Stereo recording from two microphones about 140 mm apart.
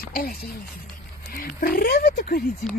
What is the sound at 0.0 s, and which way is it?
Speech, 90° left.